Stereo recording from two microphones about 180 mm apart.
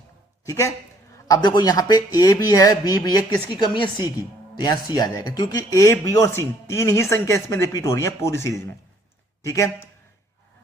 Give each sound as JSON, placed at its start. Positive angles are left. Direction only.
{"t": 0.4, "sound": "a man's voice", "side_deg": 20}